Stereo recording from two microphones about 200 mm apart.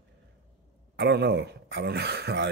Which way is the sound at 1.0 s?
55° right (ahead or behind).